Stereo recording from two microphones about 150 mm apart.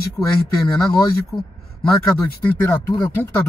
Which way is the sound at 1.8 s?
5° left (ahead or behind).